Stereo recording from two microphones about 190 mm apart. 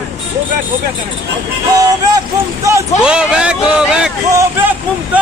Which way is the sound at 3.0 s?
5° right (ahead or behind).